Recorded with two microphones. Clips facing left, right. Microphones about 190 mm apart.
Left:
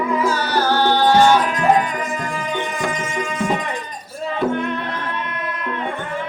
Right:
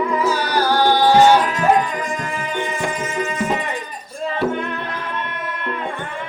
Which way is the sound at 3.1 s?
5° right (ahead or behind).